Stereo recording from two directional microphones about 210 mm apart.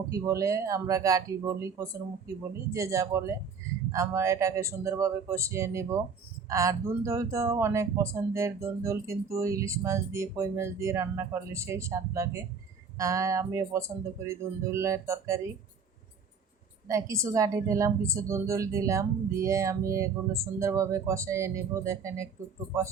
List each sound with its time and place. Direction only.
0.1 s speech: 15° right (ahead or behind)
16.9 s speech: 15° right (ahead or behind)